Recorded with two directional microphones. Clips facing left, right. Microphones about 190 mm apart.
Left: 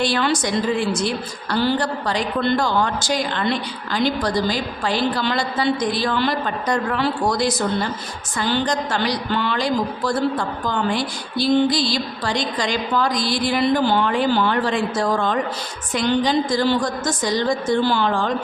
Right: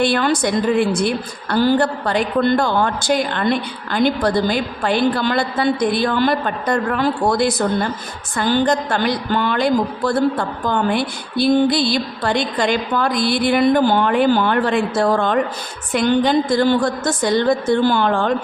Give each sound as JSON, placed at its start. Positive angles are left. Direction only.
{"t": 0.0, "sound": "a woman's voice", "side_deg": -55}